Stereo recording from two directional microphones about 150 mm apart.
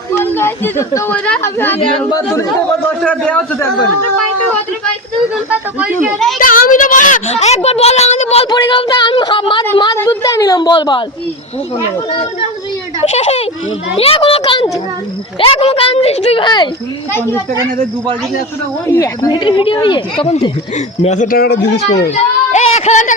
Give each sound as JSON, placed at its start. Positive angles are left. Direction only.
{"t": 0.2, "sound": "speech", "side_deg": 15}
{"t": 1.8, "sound": "a woman's voice", "side_deg": 25}
{"t": 3.0, "sound": "speech", "side_deg": 5}
{"t": 6.4, "sound": "a woman's voice", "side_deg": 65}
{"t": 8.4, "sound": "a woman's voice", "side_deg": 30}
{"t": 13.0, "sound": "a woman's voice", "side_deg": 45}
{"t": 17.1, "sound": "speech", "side_deg": 15}
{"t": 17.6, "sound": "speech", "side_deg": -25}
{"t": 18.9, "sound": "a woman's voice", "side_deg": 20}
{"t": 20.7, "sound": "speech", "side_deg": 50}
{"t": 22.0, "sound": "a woman's voice", "side_deg": 50}